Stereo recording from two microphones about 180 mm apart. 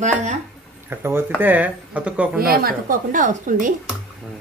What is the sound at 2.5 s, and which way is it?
A woman's voice, 55° right (ahead or behind).